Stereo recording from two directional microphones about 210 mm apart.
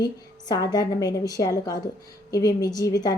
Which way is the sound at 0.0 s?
20° left (ahead or behind).